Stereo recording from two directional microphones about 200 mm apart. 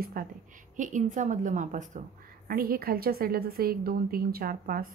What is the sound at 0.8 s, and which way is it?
A woman's voice, 40° right (ahead or behind).